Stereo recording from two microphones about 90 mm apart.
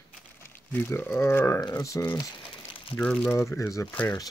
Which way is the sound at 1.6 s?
45° left (ahead or behind).